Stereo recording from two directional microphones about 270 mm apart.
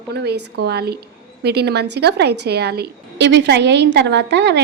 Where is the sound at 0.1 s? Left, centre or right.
Right.